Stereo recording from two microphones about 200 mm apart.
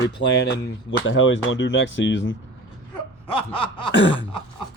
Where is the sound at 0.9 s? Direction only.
70° left (ahead or behind).